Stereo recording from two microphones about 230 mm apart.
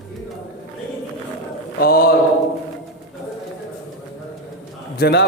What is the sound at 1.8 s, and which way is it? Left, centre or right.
Speech, left.